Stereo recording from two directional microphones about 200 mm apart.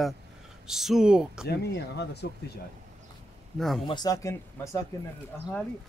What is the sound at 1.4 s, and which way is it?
Speech, 55° left (ahead or behind).